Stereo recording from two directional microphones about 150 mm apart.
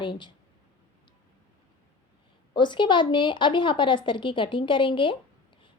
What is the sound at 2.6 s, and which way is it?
Speech, 30° left (ahead or behind).